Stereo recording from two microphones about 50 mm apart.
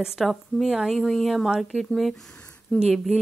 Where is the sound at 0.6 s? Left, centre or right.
Centre.